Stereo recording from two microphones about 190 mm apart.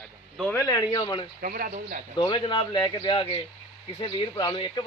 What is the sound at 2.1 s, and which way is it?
A man's voice, 25° left (ahead or behind).